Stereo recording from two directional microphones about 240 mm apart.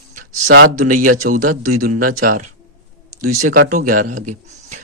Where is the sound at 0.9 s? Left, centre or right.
Right.